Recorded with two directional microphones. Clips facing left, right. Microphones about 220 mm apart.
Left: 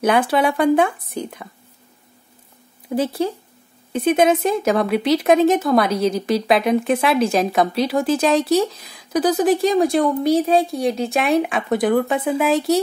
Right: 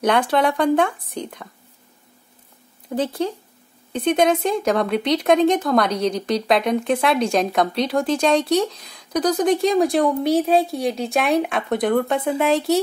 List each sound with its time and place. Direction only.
0.0 s speech: 5° left (ahead or behind)
2.9 s speech: 10° left (ahead or behind)